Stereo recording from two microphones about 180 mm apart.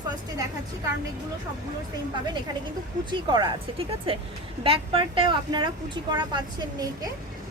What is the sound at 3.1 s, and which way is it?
Speech, 25° right (ahead or behind).